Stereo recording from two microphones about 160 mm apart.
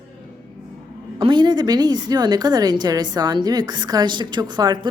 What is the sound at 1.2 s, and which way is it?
A woman's voice, 30° right (ahead or behind).